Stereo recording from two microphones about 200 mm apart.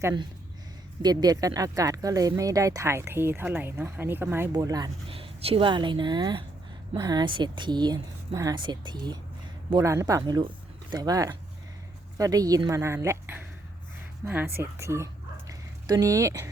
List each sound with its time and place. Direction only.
0.0 s speech: 20° right (ahead or behind)